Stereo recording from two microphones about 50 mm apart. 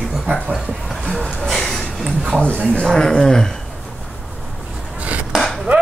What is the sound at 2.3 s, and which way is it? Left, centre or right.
Speech, left.